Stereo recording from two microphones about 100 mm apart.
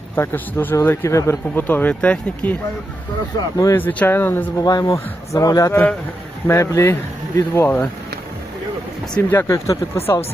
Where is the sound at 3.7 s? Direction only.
20° left (ahead or behind).